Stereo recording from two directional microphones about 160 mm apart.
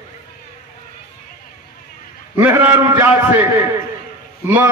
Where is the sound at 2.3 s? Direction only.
10° right (ahead or behind).